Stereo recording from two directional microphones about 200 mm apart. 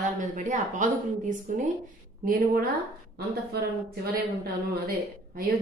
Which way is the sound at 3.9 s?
50° right (ahead or behind).